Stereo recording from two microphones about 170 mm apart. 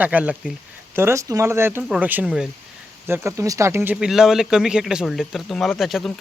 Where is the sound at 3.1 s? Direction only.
15° right (ahead or behind).